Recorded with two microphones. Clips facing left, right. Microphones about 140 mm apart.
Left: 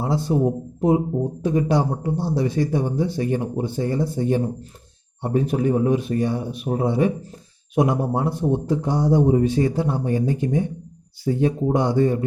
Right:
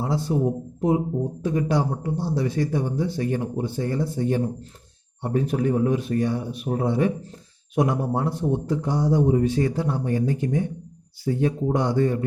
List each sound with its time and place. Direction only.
0.0 s speech: 20° left (ahead or behind)